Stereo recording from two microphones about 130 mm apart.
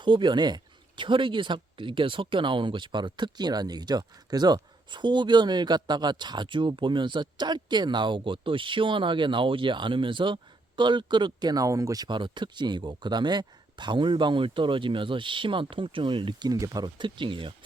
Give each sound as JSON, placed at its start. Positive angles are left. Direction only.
{"t": 0.0, "sound": "speech", "side_deg": -35}